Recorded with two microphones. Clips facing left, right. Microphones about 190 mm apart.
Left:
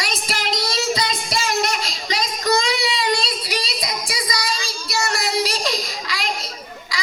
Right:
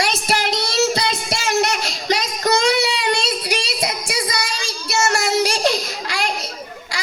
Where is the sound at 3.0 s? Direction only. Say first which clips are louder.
Right 1 dB; 65° right (ahead or behind).